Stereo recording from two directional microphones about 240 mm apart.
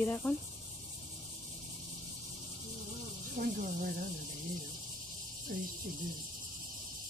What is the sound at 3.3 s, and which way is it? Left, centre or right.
Speech, right.